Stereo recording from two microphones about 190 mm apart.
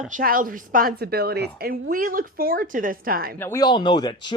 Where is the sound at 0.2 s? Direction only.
45° right (ahead or behind).